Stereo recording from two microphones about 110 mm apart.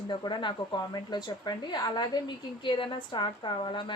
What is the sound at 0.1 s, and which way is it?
A woman's voice, 45° left (ahead or behind).